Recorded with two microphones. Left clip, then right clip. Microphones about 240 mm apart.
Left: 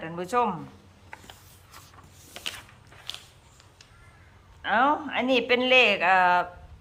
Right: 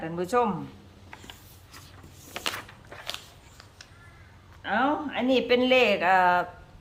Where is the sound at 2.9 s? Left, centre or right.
Centre.